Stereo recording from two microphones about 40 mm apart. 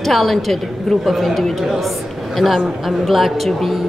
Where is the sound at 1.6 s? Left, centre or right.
Centre.